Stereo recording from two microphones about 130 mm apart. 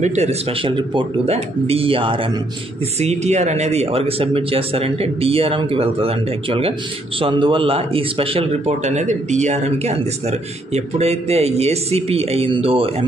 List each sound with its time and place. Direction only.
0.0 s speech: 60° right (ahead or behind); by 2.1 s 45° right (ahead or behind)
3.0 s speech: 60° right (ahead or behind)